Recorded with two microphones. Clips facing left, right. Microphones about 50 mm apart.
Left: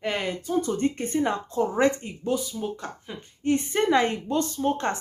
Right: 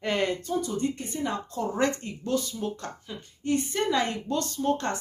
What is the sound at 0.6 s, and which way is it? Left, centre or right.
Speech, left.